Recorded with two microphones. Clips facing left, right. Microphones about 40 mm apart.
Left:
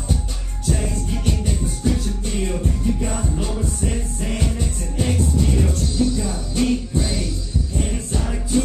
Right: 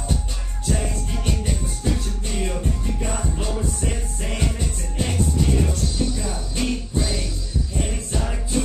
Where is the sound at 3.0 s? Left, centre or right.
Centre.